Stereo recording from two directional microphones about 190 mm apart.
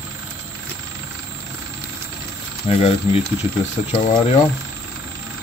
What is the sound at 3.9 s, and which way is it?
Speech, 30° left (ahead or behind).